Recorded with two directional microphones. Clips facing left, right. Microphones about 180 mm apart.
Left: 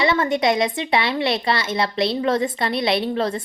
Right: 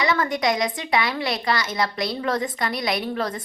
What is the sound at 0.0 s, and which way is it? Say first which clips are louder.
A woman's voice: left 3 dB; 25° left (ahead or behind).